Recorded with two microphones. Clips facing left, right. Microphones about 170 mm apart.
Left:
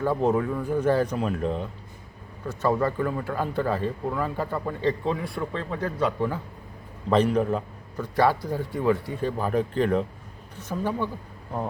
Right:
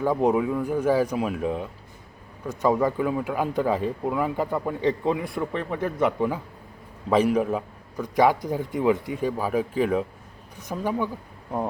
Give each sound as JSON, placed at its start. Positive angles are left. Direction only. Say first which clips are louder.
{"t": 0.0, "sound": "speech", "louder": "right 2 dB", "side_deg": -15}